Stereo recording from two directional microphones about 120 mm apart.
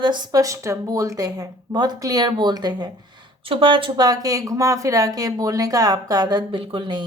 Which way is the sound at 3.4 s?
50° right (ahead or behind).